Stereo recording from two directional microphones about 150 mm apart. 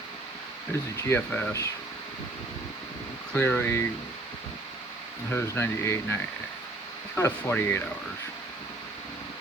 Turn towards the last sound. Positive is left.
turn(degrees=15)  # may be behind; listen again after turning